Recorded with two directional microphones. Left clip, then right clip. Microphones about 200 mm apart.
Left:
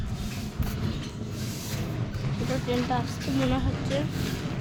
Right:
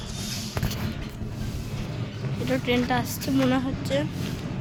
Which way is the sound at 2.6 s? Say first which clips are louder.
Right 3 dB; 25° right (ahead or behind).